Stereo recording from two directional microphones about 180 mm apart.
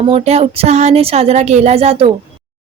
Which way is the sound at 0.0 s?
35° right (ahead or behind).